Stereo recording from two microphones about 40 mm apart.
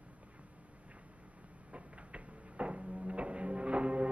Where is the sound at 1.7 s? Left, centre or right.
Right.